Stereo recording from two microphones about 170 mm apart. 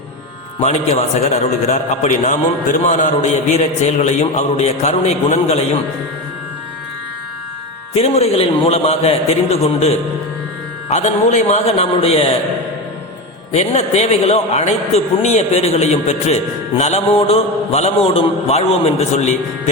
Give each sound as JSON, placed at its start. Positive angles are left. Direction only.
{"t": 0.6, "sound": "a man's voice", "side_deg": 40}
{"t": 7.9, "sound": "a man's voice", "side_deg": 40}
{"t": 10.9, "sound": "a man's voice", "side_deg": 45}
{"t": 13.5, "sound": "a man's voice", "side_deg": 40}